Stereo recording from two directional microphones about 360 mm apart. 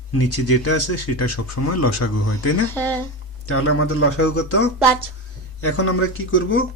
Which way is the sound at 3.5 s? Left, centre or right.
Left.